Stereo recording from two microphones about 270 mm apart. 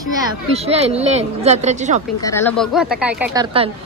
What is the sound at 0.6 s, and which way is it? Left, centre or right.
Speech, right.